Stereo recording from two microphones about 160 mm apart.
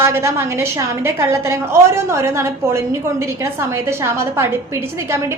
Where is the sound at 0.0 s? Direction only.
15° right (ahead or behind).